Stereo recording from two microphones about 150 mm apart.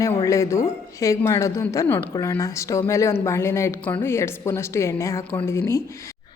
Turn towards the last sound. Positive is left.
turn(degrees=20)  # may be behind; listen again after turning